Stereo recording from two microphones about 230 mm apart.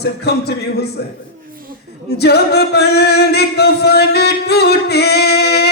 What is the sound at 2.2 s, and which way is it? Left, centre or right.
Music, left.